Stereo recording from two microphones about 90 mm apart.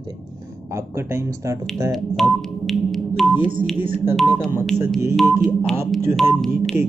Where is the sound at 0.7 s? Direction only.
30° right (ahead or behind).